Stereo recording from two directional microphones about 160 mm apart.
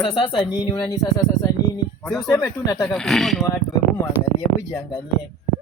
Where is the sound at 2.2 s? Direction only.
20° left (ahead or behind).